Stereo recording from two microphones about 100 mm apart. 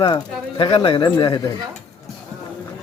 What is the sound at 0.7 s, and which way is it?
Speech, 70° left (ahead or behind).